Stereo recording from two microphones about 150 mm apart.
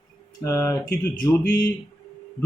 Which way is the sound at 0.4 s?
20° left (ahead or behind).